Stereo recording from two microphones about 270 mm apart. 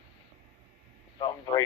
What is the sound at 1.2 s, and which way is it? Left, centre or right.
Speech, centre.